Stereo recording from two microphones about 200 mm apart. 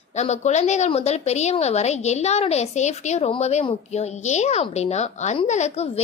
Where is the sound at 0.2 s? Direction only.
35° left (ahead or behind).